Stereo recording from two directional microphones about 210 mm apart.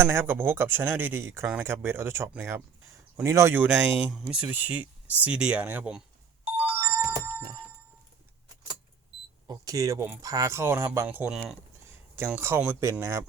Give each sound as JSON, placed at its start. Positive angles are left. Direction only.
{"t": 0.0, "sound": "speech", "side_deg": -10}
{"t": 7.0, "sound": "a sound", "side_deg": -15}
{"t": 9.5, "sound": "speech", "side_deg": -15}